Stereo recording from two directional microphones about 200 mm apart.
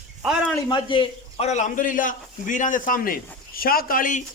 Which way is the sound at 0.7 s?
25° left (ahead or behind).